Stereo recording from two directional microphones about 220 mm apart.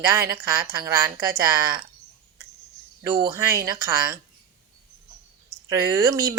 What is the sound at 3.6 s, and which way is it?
Speech, 10° right (ahead or behind).